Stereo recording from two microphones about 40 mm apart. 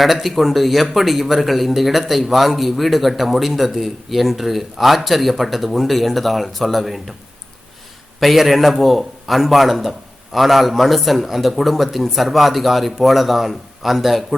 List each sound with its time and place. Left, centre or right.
0.0 s speech: centre
8.2 s speech: centre